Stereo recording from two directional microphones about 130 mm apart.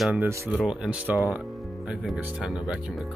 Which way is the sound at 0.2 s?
15° right (ahead or behind).